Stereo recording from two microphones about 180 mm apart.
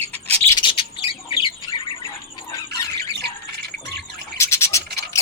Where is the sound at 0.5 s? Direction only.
30° left (ahead or behind).